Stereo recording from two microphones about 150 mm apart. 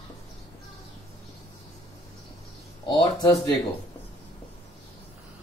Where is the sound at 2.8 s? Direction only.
30° left (ahead or behind).